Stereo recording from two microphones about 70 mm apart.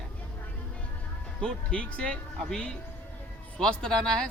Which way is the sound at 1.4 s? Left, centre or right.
Centre.